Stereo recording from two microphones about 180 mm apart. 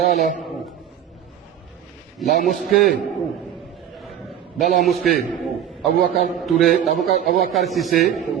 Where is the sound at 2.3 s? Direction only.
45° left (ahead or behind).